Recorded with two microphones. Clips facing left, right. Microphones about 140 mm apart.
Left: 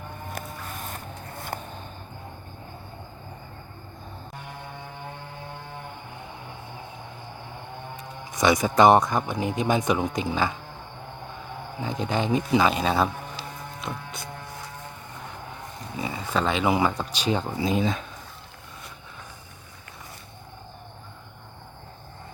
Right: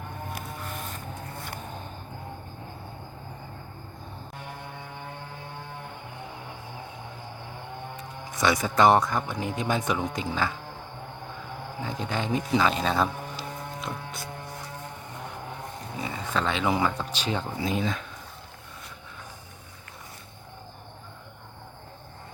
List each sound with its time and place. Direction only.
8.3 s speech: 15° left (ahead or behind)
11.8 s speech: 20° left (ahead or behind)
13.8 s a sound: centre (ahead or behind)
16.0 s speech: 10° left (ahead or behind)